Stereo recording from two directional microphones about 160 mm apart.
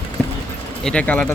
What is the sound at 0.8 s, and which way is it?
Speech, 5° left (ahead or behind).